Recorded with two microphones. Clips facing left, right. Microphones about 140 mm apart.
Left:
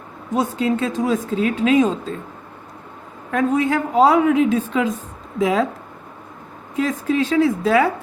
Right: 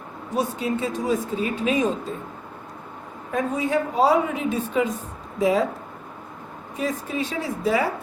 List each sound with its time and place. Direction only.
0.3 s speech: 90° left
3.3 s speech: 90° left
6.7 s speech: 90° left